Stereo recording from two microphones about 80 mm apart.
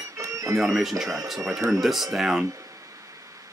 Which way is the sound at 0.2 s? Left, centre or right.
Right.